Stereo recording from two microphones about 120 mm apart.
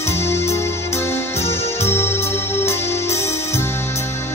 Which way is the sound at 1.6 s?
60° left (ahead or behind).